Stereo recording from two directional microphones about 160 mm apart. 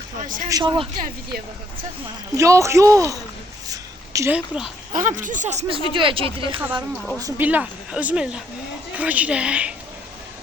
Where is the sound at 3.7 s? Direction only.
20° right (ahead or behind).